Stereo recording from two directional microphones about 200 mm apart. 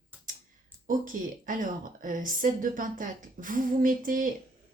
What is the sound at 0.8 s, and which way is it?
Speech, 40° right (ahead or behind).